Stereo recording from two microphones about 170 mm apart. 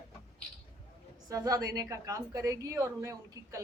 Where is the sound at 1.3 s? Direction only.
20° right (ahead or behind).